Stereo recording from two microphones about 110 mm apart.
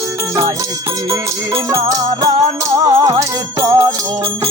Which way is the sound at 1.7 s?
35° right (ahead or behind).